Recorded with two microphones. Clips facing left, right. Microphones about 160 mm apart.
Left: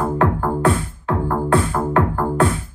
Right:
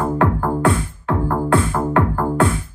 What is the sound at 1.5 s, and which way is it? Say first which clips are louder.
Music: even; 20° right (ahead or behind).